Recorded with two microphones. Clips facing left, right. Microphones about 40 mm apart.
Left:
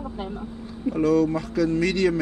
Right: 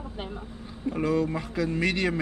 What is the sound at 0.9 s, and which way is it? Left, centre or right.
Speech, right.